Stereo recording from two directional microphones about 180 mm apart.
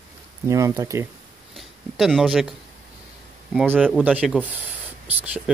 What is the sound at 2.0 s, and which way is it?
Speech, centre (ahead or behind).